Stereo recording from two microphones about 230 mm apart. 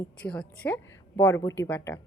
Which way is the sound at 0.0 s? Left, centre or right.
Centre.